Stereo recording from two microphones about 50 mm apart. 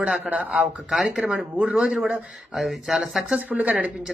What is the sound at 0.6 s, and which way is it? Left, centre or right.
Speech, centre.